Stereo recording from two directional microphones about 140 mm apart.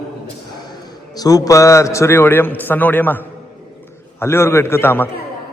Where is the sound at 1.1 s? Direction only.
25° left (ahead or behind).